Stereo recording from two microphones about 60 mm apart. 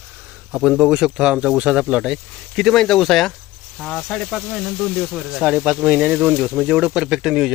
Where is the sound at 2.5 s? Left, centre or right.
Centre.